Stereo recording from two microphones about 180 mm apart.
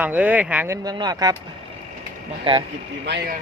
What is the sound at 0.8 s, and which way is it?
Speech, 20° right (ahead or behind).